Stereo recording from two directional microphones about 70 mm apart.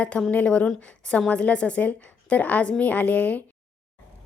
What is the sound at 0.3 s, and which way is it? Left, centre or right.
A woman's voice, centre.